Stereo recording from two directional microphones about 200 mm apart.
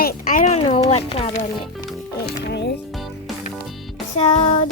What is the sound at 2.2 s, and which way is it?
Speech, 55° left (ahead or behind).